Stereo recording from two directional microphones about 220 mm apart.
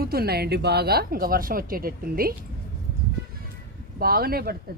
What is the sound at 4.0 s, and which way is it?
Speech, 45° right (ahead or behind).